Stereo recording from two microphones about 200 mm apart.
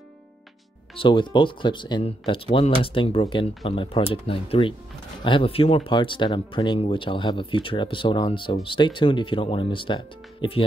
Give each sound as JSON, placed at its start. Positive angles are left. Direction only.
{"t": 0.9, "sound": "speech", "side_deg": 25}